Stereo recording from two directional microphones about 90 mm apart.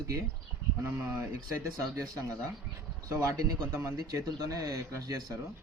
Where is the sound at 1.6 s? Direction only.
40° right (ahead or behind).